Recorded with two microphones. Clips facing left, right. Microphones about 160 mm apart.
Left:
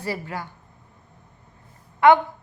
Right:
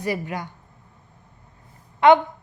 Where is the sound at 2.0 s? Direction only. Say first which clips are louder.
Right 1 dB; 20° right (ahead or behind).